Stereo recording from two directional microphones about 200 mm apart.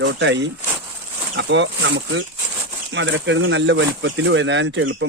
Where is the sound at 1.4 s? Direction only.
65° right (ahead or behind).